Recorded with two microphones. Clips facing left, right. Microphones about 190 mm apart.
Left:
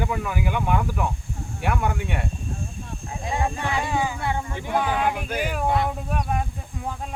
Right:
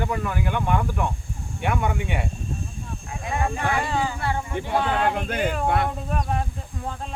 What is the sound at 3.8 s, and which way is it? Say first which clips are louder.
Speech: even; 15° left (ahead or behind).